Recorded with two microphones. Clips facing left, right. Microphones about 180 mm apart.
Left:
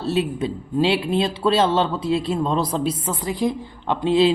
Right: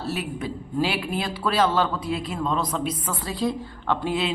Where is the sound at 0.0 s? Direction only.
25° left (ahead or behind).